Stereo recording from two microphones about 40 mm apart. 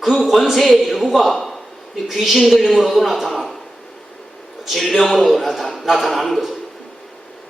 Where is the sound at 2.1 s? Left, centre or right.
Centre.